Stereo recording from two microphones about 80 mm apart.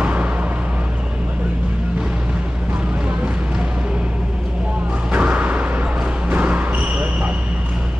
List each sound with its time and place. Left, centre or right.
0.0 s vehicle: centre
5.1 s music: centre